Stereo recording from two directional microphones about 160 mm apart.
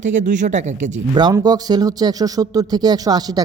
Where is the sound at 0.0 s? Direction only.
50° right (ahead or behind).